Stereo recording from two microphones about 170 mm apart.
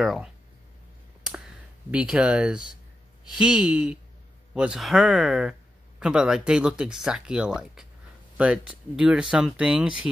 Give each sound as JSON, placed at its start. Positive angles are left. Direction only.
{"t": 0.0, "sound": "speech", "side_deg": 0}
{"t": 1.2, "sound": "clicking", "side_deg": -5}
{"t": 3.3, "sound": "speech", "side_deg": -5}